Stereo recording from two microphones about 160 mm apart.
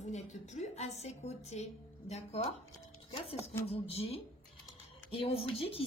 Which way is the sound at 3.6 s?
40° left (ahead or behind).